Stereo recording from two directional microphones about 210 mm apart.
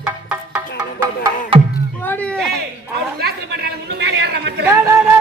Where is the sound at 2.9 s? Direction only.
50° right (ahead or behind).